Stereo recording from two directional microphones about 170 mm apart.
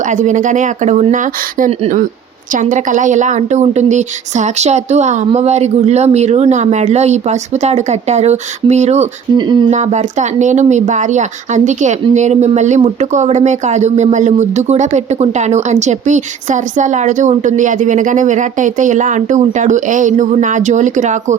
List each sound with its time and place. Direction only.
0.0 s a woman's voice: 45° right (ahead or behind)
9.4 s speech: 25° right (ahead or behind)
9.6 s speech: 45° right (ahead or behind)